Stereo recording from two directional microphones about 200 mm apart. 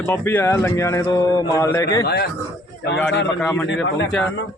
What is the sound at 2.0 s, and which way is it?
A man's voice, 55° left (ahead or behind).